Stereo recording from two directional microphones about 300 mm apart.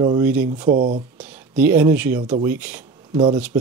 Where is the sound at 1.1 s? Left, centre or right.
Centre.